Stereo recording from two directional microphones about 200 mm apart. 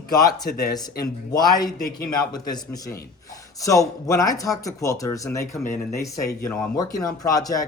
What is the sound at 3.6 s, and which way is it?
Speech, 15° left (ahead or behind).